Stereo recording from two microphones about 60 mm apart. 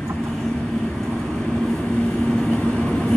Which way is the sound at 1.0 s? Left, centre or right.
Centre.